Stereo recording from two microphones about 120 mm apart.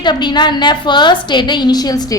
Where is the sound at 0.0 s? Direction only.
40° left (ahead or behind).